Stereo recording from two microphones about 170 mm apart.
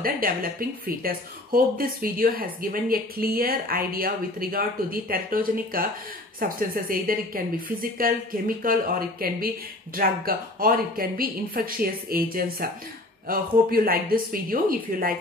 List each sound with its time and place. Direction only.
0.0 s speech: 55° right (ahead or behind)